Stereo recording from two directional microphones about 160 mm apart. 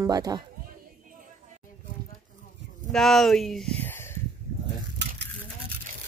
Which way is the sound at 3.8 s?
15° left (ahead or behind).